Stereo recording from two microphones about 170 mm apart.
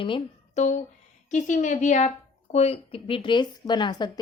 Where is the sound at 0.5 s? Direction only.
45° left (ahead or behind).